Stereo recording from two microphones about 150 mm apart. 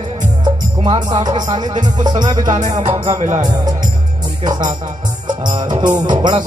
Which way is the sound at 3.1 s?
50° right (ahead or behind).